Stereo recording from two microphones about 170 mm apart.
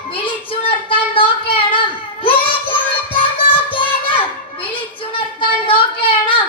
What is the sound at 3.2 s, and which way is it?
Children playing, 30° left (ahead or behind).